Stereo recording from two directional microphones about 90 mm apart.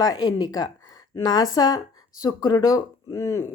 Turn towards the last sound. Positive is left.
turn(degrees=40)  # may be behind; listen again after turning